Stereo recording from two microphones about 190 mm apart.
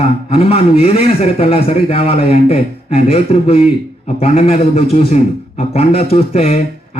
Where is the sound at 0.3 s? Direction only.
30° left (ahead or behind).